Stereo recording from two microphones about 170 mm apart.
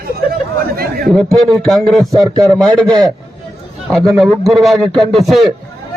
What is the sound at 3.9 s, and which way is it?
Speech, centre (ahead or behind).